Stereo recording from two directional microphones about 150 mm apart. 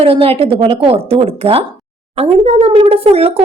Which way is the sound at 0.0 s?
40° right (ahead or behind).